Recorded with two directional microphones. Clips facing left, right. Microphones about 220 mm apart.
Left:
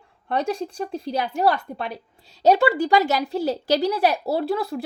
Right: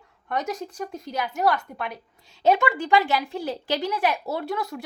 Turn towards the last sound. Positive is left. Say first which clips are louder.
# left 5 dB
turn(degrees=35)  # may be behind; listen again after turning